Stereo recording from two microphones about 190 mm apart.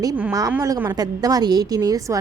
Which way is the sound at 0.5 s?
15° right (ahead or behind).